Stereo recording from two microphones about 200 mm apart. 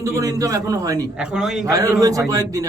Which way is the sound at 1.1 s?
5° right (ahead or behind).